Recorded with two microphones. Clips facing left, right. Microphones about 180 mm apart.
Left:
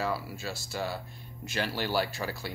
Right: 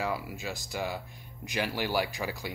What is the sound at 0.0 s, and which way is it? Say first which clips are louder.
Speech: even; 15° right (ahead or behind).